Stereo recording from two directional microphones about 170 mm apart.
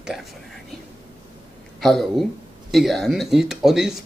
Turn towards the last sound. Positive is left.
turn(degrees=0)  # may be behind; listen again after turning